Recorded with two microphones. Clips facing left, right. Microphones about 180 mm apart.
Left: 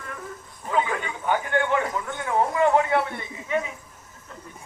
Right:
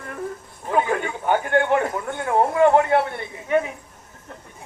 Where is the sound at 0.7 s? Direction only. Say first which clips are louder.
Right 4 dB; 50° right (ahead or behind).